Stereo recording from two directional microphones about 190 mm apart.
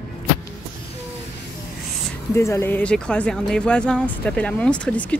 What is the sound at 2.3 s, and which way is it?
Speech, 15° left (ahead or behind).